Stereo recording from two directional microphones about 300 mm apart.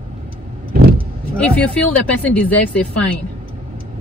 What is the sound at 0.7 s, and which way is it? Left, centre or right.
Vehicle, right.